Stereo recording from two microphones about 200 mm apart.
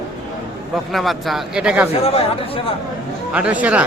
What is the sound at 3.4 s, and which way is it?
Speech, 5° right (ahead or behind).